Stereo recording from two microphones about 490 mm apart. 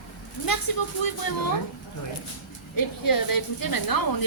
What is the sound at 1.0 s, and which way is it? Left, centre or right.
Speech, left.